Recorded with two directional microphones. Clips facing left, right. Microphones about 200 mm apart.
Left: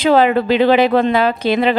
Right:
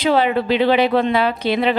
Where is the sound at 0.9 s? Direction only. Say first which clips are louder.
Left 3 dB; 45° left (ahead or behind).